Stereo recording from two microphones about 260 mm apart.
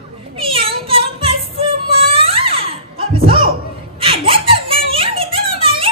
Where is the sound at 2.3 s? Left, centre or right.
Right.